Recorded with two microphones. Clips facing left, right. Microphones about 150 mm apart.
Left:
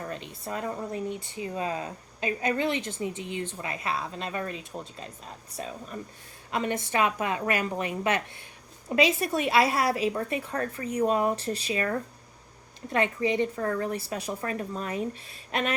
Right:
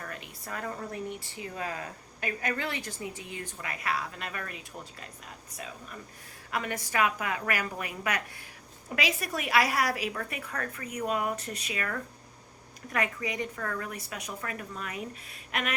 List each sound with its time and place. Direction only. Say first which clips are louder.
0.0 s a woman's voice: left 6 dB; 25° left (ahead or behind)